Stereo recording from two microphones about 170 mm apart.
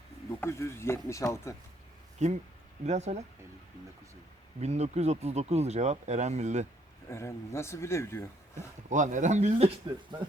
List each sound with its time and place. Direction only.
0.3 s speech: 15° left (ahead or behind)
2.1 s speech: 45° right (ahead or behind)
4.6 s speech: 40° right (ahead or behind)
7.1 s speech: 15° left (ahead or behind)
8.9 s speech: 45° right (ahead or behind)